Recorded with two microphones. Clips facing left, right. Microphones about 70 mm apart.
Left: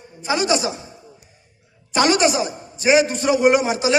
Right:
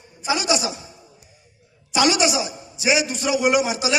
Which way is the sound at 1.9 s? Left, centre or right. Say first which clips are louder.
Left 2 dB; left.